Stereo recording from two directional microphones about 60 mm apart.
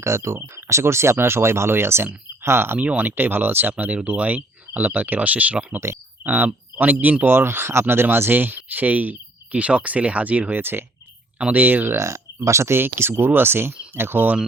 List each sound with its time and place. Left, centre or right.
0.0 s speech: right
2.7 s speech: right
10.6 s speech: right
11.9 s speech: right